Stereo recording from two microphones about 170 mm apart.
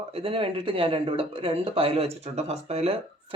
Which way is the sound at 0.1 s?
35° right (ahead or behind).